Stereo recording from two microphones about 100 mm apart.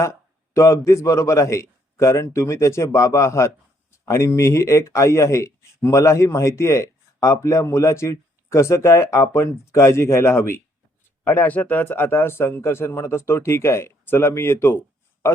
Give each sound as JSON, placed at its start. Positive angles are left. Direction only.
{"t": 0.5, "sound": "a man's voice", "side_deg": 30}